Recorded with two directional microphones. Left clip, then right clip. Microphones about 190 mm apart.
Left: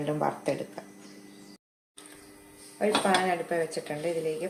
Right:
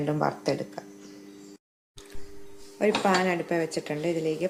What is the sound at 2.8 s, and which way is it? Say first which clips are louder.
Speech: right 1 dB; 40° right (ahead or behind).